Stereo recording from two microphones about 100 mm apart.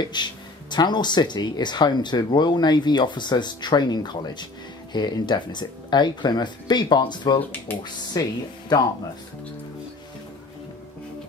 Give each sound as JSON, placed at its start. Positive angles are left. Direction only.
{"t": 0.0, "sound": "speech", "side_deg": 45}
{"t": 7.3, "sound": "speech", "side_deg": 20}
{"t": 8.2, "sound": "speech", "side_deg": 35}